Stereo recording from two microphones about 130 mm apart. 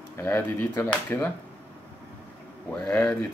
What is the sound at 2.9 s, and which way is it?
Speech, 15° left (ahead or behind).